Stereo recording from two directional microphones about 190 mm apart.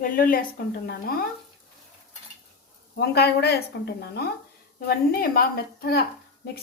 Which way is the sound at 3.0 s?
60° left (ahead or behind).